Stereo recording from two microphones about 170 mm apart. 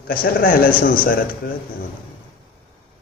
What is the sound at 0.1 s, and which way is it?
A man's voice, 60° left (ahead or behind).